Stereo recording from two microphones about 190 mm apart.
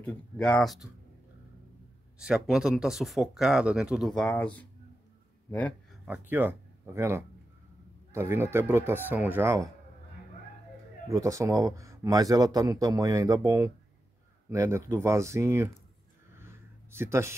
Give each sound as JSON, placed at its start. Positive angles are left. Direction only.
{"t": 0.0, "sound": "speech", "side_deg": 5}
{"t": 2.1, "sound": "speech", "side_deg": -5}
{"t": 6.0, "sound": "speech", "side_deg": -10}
{"t": 11.1, "sound": "speech", "side_deg": -15}
{"t": 16.3, "sound": "a sound", "side_deg": -15}